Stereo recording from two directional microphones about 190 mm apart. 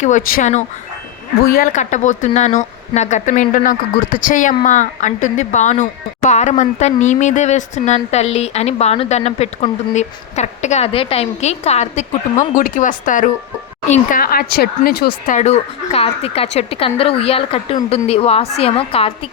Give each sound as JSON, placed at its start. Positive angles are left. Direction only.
{"t": 0.3, "sound": "speech", "side_deg": 45}
{"t": 15.4, "sound": "a woman's voice", "side_deg": 35}